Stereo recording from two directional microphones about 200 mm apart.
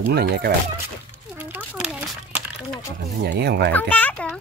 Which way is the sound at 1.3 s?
10° right (ahead or behind).